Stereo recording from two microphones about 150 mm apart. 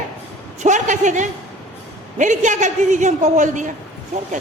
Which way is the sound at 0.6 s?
55° right (ahead or behind).